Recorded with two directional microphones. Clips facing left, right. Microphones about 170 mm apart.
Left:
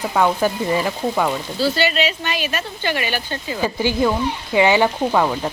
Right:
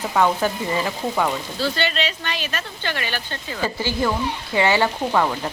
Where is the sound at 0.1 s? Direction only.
10° left (ahead or behind).